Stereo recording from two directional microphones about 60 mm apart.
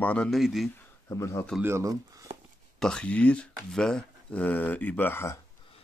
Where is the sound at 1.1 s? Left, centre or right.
Left.